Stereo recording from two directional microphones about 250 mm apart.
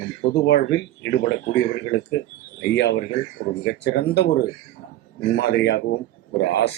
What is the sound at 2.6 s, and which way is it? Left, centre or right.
Speech, left.